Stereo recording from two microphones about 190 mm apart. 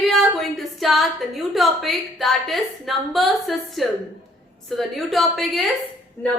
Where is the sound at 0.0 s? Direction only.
Centre (ahead or behind).